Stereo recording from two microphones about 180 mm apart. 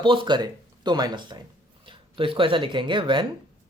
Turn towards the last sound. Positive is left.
turn(degrees=-25)  # may be behind; listen again after turning